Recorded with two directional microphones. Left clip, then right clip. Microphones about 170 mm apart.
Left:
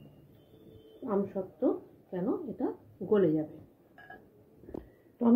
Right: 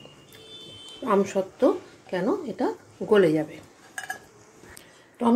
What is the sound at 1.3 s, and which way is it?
Speech, 75° right (ahead or behind).